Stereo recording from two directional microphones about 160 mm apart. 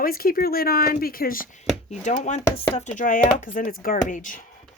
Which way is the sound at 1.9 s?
50° left (ahead or behind).